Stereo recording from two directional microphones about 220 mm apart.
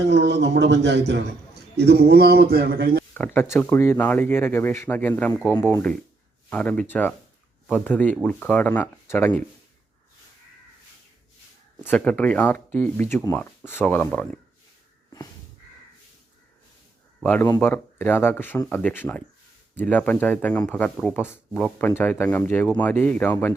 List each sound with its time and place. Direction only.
0.0 s a man's voice: 50° right (ahead or behind)
3.2 s speech: 10° left (ahead or behind)
11.8 s speech: 5° left (ahead or behind)
17.2 s speech: 10° left (ahead or behind)